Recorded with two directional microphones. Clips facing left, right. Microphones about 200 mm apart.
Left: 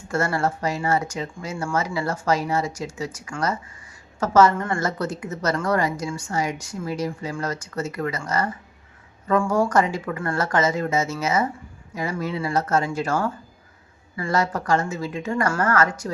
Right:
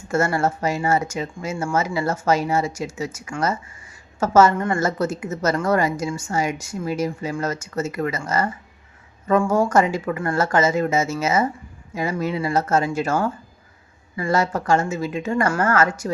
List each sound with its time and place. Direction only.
0.1 s a woman's voice: 25° right (ahead or behind)
14.2 s a woman's voice: 25° right (ahead or behind)